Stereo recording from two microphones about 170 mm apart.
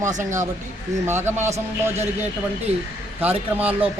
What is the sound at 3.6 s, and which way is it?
Speech, 10° right (ahead or behind).